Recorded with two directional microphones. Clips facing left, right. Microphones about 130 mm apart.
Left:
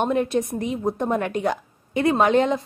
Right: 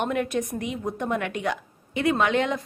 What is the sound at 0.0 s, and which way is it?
A woman's voice, 30° left (ahead or behind).